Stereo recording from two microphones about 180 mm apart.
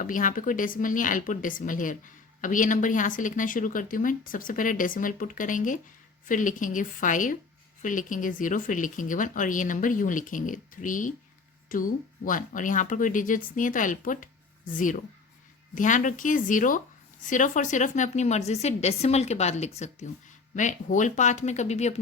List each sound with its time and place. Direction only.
0.0 s a woman's voice: 45° left (ahead or behind)